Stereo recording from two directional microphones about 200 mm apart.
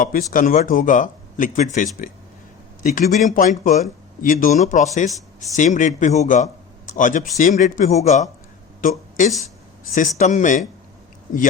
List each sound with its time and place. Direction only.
0.0 s a man's voice: 45° left (ahead or behind)